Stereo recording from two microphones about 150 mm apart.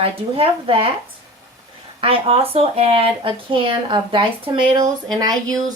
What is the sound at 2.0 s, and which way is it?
Speech, 40° right (ahead or behind).